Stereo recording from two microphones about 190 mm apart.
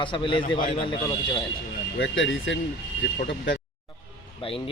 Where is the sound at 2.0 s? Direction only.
75° left (ahead or behind).